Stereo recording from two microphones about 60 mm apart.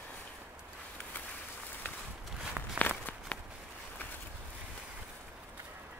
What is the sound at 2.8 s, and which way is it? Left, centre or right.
Walk, left.